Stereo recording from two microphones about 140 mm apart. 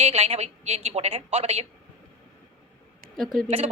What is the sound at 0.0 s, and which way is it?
A woman's voice, 45° right (ahead or behind).